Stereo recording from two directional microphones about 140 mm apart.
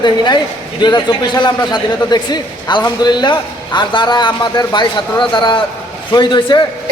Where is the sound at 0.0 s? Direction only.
35° left (ahead or behind).